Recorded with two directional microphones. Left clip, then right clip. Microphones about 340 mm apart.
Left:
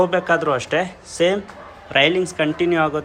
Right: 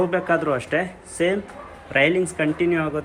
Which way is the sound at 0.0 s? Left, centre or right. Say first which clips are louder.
Left 3 dB; centre.